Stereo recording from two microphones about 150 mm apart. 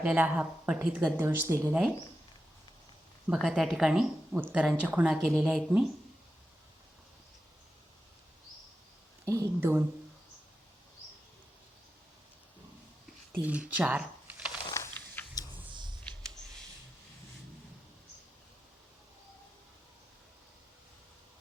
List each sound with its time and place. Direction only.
0.0 s speech: 10° right (ahead or behind)
3.2 s speech: 5° right (ahead or behind)
9.2 s a woman's voice: 20° right (ahead or behind)
13.4 s speech: 10° right (ahead or behind)
14.7 s a sound: 15° left (ahead or behind)
15.7 s a sound: 30° right (ahead or behind)